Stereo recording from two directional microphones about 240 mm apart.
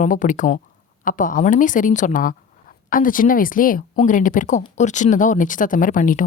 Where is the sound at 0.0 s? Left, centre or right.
Left.